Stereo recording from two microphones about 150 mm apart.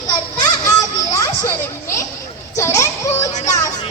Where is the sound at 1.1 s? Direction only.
20° left (ahead or behind).